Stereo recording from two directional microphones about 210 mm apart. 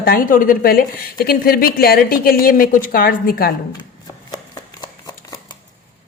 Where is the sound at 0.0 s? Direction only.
45° left (ahead or behind).